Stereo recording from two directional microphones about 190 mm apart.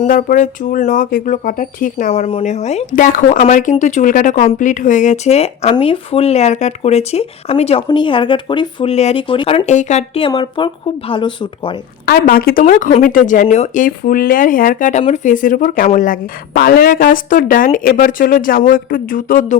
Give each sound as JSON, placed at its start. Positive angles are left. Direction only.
{"t": 0.0, "sound": "speech", "side_deg": 45}
{"t": 9.6, "sound": "speech", "side_deg": 40}
{"t": 12.0, "sound": "speech", "side_deg": 50}